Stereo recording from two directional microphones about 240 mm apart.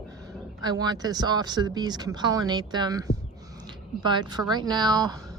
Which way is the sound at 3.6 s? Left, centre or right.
Centre.